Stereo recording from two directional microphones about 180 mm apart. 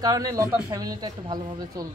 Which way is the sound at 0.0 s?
20° right (ahead or behind).